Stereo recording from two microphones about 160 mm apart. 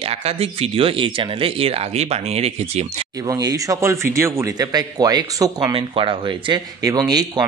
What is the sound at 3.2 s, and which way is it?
Speech, 25° right (ahead or behind).